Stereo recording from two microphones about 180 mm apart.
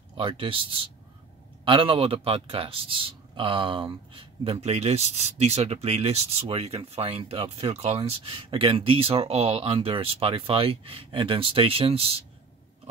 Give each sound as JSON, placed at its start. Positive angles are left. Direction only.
{"t": 0.2, "sound": "a man's voice", "side_deg": -30}